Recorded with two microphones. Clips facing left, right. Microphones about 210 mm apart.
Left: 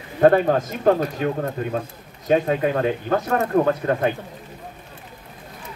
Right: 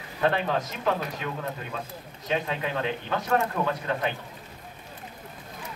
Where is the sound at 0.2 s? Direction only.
45° left (ahead or behind).